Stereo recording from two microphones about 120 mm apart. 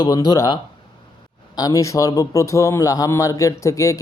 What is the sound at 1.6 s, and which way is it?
A man's voice, 30° left (ahead or behind).